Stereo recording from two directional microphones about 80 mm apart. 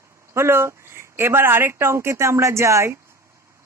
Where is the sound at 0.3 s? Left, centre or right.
Right.